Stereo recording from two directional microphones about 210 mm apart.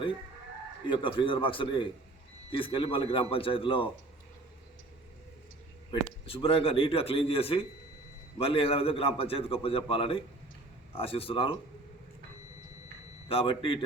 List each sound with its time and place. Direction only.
0.9 s a man's voice: 25° left (ahead or behind)
5.9 s a man's voice: 25° left (ahead or behind)
13.2 s a man's voice: 25° left (ahead or behind)